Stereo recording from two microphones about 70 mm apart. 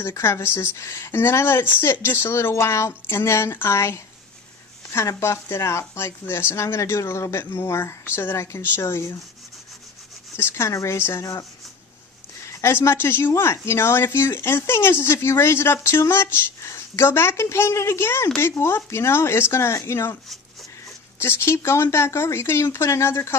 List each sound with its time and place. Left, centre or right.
0.0 s speech: left
10.3 s speech: left
12.6 s speech: left
21.2 s speech: left